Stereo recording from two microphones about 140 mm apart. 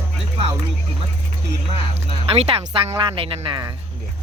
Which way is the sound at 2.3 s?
45° right (ahead or behind).